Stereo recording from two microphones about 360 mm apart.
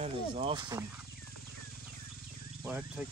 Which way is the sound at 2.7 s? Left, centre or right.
Centre.